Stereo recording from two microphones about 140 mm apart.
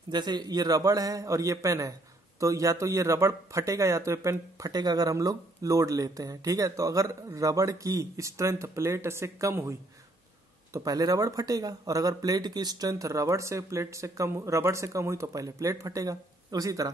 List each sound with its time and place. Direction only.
0.1 s speech: 30° right (ahead or behind)